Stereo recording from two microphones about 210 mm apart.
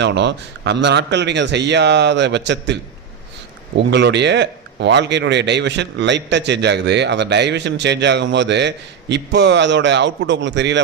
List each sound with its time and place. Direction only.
0.0 s speech: 55° right (ahead or behind)
3.8 s speech: 55° right (ahead or behind)